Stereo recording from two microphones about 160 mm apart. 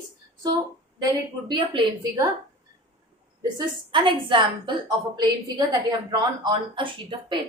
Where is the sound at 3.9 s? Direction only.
30° right (ahead or behind).